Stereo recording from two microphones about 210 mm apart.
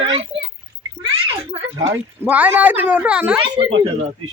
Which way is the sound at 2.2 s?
10° right (ahead or behind).